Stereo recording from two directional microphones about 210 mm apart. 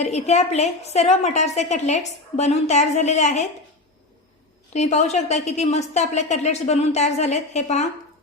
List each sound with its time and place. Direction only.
0.0 s a woman's voice: 30° left (ahead or behind)
4.7 s a woman's voice: 30° left (ahead or behind)